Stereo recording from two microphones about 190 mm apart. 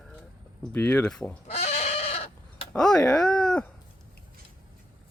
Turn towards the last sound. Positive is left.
turn(degrees=5)  # may be behind; listen again after turning